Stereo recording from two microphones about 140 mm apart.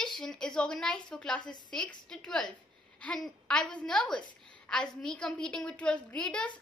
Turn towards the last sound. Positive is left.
turn(degrees=5)  # may be behind; listen again after turning